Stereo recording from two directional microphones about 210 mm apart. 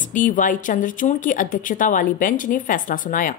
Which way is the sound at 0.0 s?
40° left (ahead or behind).